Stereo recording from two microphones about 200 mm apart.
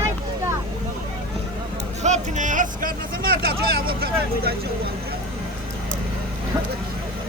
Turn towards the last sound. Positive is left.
turn(degrees=-10)  # may be behind; listen again after turning